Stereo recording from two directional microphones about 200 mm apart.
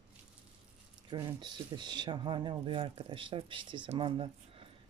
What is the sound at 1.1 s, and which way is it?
Speech, 20° right (ahead or behind).